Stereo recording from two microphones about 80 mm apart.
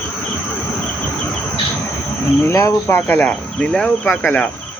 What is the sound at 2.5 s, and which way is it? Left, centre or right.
Speech, left.